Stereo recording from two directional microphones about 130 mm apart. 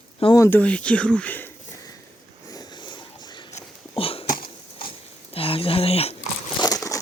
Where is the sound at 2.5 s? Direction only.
30° left (ahead or behind).